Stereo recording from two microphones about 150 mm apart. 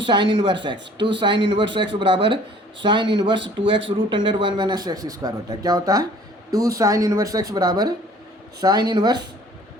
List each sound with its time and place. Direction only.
0.0 s speech: 35° right (ahead or behind)